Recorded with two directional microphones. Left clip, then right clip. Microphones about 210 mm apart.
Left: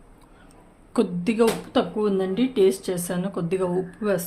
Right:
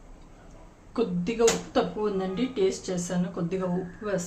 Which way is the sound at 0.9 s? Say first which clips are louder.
Left 4 dB; 55° left (ahead or behind).